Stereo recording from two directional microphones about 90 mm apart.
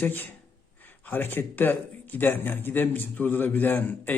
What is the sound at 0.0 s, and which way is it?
A man's voice, 20° left (ahead or behind).